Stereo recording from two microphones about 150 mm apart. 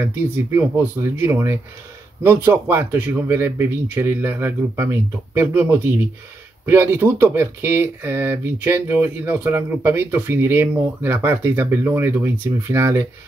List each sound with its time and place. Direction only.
0.0 s speech: 15° right (ahead or behind)